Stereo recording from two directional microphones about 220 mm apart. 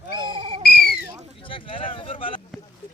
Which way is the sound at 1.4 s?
25° left (ahead or behind).